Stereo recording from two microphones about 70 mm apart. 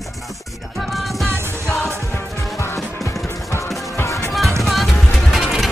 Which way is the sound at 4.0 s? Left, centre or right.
Left.